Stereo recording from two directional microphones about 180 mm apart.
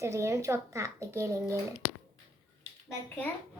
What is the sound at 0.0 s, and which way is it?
Speech, 15° right (ahead or behind).